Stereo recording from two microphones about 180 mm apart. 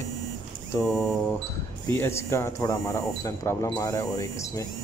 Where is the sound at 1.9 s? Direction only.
15° left (ahead or behind).